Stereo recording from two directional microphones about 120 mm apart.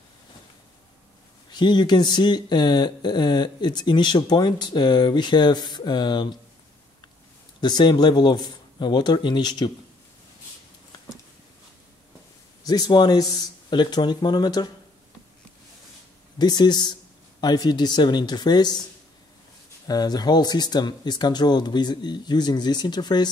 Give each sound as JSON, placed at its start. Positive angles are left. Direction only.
{"t": 1.5, "sound": "speech", "side_deg": 40}
{"t": 7.6, "sound": "speech", "side_deg": 35}
{"t": 12.6, "sound": "speech", "side_deg": 35}
{"t": 16.3, "sound": "speech", "side_deg": 35}
{"t": 19.9, "sound": "speech", "side_deg": 35}